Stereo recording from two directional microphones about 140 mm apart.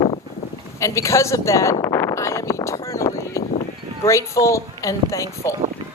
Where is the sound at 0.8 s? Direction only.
20° left (ahead or behind).